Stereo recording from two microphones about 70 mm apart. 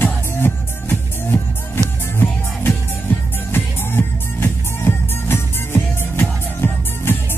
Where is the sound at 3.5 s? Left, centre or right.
Left.